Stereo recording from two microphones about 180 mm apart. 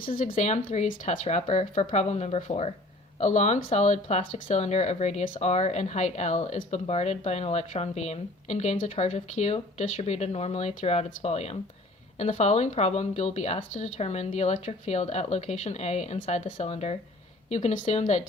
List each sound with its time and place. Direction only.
0.3 s speech: 35° left (ahead or behind)